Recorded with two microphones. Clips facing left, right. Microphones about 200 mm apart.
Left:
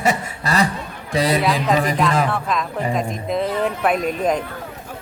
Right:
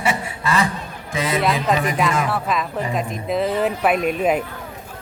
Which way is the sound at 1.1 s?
35° left (ahead or behind).